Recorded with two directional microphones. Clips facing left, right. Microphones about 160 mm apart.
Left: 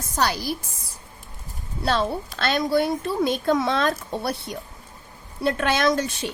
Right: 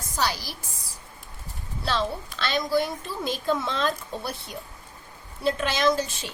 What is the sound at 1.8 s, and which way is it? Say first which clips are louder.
Speech: left 4 dB; 55° left (ahead or behind).